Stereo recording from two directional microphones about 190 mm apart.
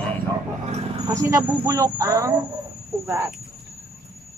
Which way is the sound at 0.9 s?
20° right (ahead or behind).